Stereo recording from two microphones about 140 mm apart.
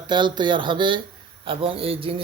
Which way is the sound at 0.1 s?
35° right (ahead or behind).